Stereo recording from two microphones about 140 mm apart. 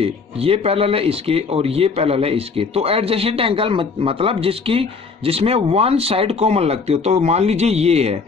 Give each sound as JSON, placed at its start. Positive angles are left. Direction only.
{"t": 0.0, "sound": "speech", "side_deg": -45}